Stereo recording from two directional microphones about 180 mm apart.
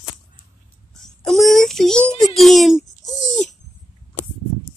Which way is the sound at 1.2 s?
Centre (ahead or behind).